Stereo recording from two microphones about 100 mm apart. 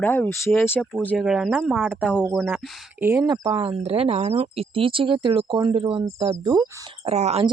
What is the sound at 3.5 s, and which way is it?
Speech, 75° right (ahead or behind).